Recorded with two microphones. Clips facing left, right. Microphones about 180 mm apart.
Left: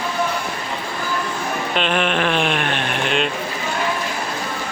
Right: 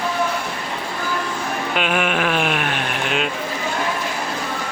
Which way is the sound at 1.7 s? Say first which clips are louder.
Left 1 dB; 5° right (ahead or behind).